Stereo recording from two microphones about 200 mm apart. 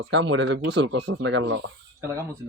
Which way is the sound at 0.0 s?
65° right (ahead or behind).